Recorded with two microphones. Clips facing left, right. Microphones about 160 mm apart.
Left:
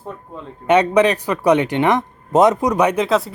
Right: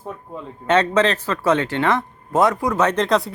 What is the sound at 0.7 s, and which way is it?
Speech, 15° left (ahead or behind).